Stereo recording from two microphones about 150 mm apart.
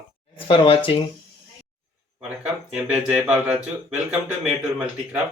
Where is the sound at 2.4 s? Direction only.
5° right (ahead or behind).